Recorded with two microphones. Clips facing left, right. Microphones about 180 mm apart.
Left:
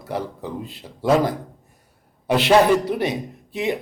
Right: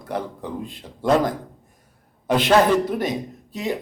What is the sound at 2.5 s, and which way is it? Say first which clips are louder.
Speech: left 2 dB; 10° left (ahead or behind).